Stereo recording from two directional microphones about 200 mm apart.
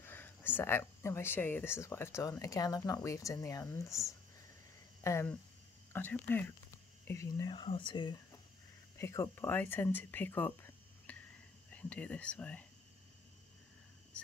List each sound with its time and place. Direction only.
0.0 s speech: 10° left (ahead or behind)